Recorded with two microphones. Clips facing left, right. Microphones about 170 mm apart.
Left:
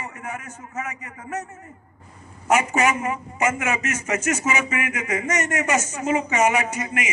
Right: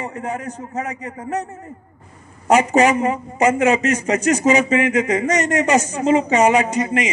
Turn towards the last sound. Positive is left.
turn(degrees=-35)  # may be behind; listen again after turning